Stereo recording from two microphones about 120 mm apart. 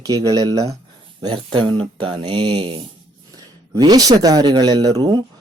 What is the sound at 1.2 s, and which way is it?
A man's voice, 40° right (ahead or behind).